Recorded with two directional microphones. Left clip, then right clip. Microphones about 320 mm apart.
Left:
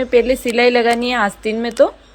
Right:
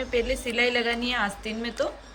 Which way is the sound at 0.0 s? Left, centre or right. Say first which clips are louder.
Left 12 dB; centre.